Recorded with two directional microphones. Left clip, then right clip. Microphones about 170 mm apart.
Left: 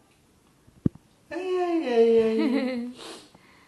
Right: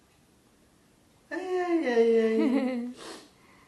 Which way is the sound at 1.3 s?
5° right (ahead or behind).